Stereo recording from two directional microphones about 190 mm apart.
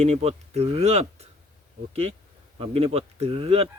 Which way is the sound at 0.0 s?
35° right (ahead or behind).